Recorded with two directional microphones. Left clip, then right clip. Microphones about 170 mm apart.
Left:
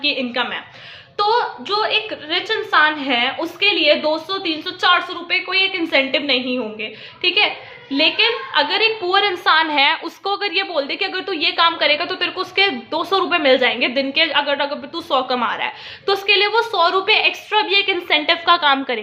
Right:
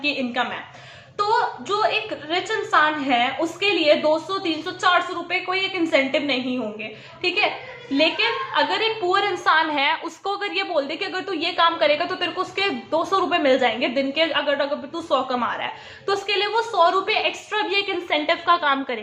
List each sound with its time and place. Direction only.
0.0 s a woman's voice: 25° left (ahead or behind)